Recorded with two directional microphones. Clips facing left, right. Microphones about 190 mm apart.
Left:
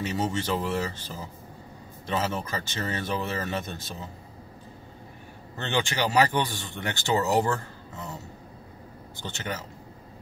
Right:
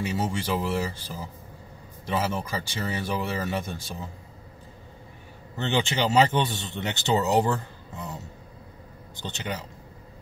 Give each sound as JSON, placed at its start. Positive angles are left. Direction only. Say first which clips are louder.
{"t": 0.2, "sound": "speech", "louder": "even", "side_deg": -10}
{"t": 5.6, "sound": "speech", "louder": "right 2 dB", "side_deg": -20}